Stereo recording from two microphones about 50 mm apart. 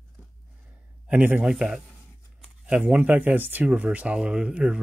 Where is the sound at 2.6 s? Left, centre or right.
Right.